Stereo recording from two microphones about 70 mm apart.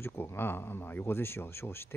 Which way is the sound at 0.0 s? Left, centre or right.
Left.